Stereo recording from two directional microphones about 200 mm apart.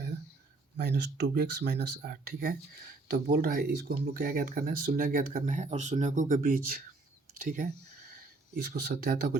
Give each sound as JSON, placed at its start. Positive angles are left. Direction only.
{"t": 0.8, "sound": "speech", "side_deg": -55}